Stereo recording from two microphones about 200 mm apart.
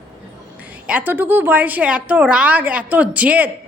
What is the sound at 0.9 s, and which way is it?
A woman's voice, 10° right (ahead or behind).